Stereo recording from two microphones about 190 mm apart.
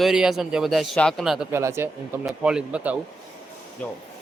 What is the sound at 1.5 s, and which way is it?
A man's voice, 15° right (ahead or behind).